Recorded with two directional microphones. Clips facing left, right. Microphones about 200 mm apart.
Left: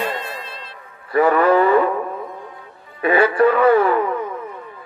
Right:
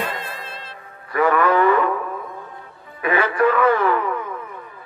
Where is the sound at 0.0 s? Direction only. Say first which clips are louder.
Left 3 dB; 55° right (ahead or behind).